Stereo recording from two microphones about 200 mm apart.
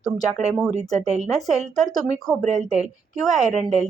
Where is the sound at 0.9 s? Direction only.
35° right (ahead or behind).